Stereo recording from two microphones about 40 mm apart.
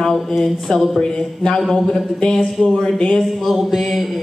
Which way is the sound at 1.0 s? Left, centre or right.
Left.